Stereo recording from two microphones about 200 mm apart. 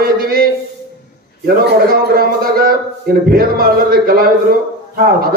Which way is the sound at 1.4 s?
50° right (ahead or behind).